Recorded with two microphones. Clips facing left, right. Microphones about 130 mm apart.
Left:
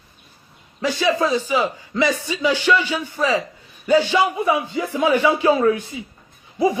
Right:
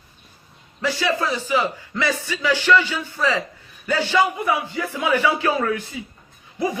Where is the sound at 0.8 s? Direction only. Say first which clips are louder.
Left 3 dB; 20° left (ahead or behind).